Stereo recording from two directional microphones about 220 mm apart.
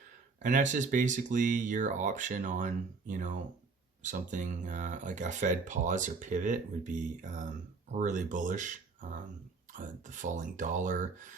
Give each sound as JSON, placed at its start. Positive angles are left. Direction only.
{"t": 0.4, "sound": "speech", "side_deg": -35}